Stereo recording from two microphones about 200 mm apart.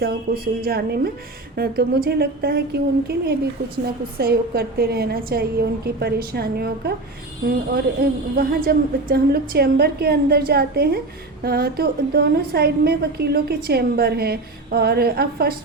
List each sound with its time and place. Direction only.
0.0 s a woman's voice: 50° right (ahead or behind)